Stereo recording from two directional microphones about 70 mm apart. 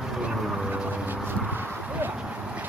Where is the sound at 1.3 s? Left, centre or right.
Right.